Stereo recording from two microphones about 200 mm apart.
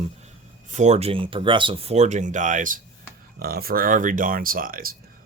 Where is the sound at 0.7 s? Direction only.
35° right (ahead or behind).